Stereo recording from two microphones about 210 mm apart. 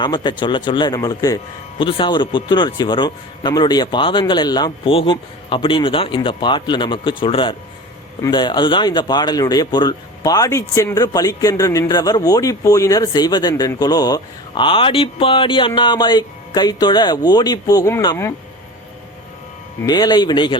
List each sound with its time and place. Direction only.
0.0 s speech: 20° left (ahead or behind)
19.8 s speech: 20° left (ahead or behind)